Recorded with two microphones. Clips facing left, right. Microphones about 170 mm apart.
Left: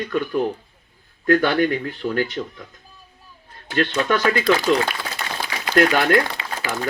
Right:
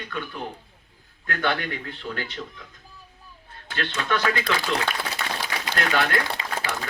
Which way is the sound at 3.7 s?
40° left (ahead or behind).